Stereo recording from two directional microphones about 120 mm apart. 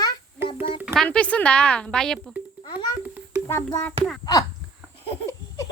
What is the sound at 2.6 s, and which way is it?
Babbling, 35° left (ahead or behind).